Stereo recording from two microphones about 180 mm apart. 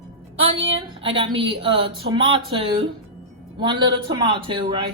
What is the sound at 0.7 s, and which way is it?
Speech, 30° right (ahead or behind).